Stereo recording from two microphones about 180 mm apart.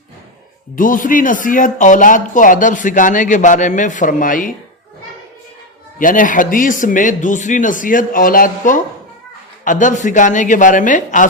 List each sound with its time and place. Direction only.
0.8 s speech: 50° left (ahead or behind)
6.0 s speech: 50° left (ahead or behind)